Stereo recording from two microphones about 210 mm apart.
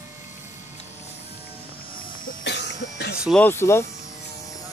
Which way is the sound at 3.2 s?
5° left (ahead or behind).